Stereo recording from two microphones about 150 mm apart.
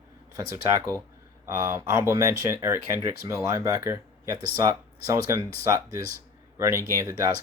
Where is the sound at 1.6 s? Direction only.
20° right (ahead or behind).